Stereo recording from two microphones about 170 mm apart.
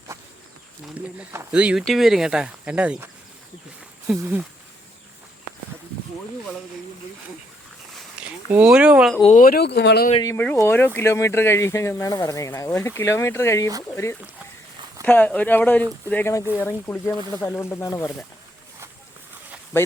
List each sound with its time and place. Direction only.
0.9 s speech: 10° right (ahead or behind)
4.2 s speech: 10° right (ahead or behind)
7.9 s speech: 5° right (ahead or behind)
9.2 s speech: 50° left (ahead or behind); by 10.1 s 75° left (ahead or behind)
10.3 s speech: 10° left (ahead or behind)
19.7 s speech: 15° left (ahead or behind)